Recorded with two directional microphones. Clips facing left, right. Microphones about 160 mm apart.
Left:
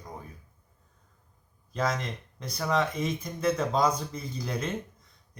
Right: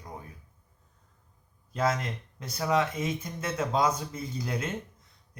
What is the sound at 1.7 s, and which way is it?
Speech, 5° right (ahead or behind).